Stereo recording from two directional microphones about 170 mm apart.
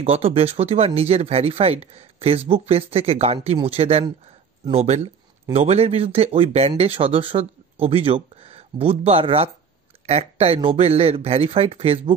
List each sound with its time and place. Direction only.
0.0 s speech: 35° right (ahead or behind)